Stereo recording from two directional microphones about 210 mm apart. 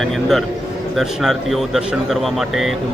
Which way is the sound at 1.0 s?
Centre (ahead or behind).